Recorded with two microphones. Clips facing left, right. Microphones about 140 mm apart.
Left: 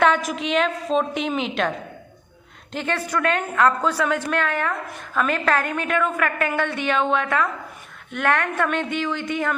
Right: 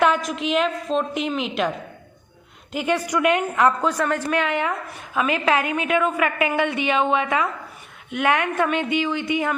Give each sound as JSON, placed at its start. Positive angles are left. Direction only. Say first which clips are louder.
{"t": 0.0, "sound": "a woman's voice", "louder": "even", "side_deg": 0}
{"t": 2.7, "sound": "a woman's voice", "louder": "right 3 dB", "side_deg": -10}
{"t": 3.9, "sound": "a woman's voice", "louder": "even", "side_deg": 0}
{"t": 4.4, "sound": "a woman's voice", "louder": "right 1 dB", "side_deg": -15}